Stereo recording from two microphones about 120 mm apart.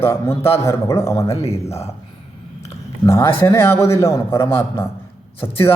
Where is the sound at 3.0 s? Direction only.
20° left (ahead or behind).